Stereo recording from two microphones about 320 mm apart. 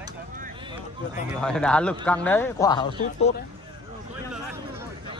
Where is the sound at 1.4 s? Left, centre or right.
Centre.